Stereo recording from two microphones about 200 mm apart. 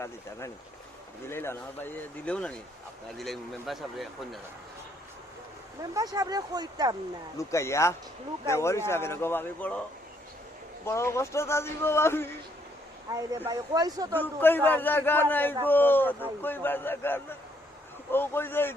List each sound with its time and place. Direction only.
0.0 s a man's voice: 15° left (ahead or behind)
5.9 s speech: 15° right (ahead or behind)
7.3 s a man's voice: 15° left (ahead or behind)
10.8 s a man's voice: 15° left (ahead or behind)
13.1 s speech: 20° right (ahead or behind)
14.1 s a man's voice: 10° left (ahead or behind)